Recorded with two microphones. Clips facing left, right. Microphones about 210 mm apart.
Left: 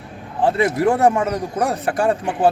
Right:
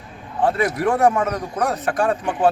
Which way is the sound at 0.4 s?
25° left (ahead or behind).